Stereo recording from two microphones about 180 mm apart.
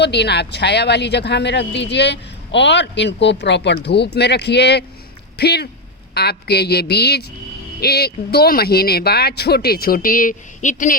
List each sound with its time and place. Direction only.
0.0 s speech: 70° left (ahead or behind); by 10.9 s 45° left (ahead or behind)